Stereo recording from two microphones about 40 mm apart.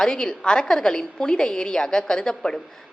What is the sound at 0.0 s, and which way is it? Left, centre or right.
A woman's voice, centre.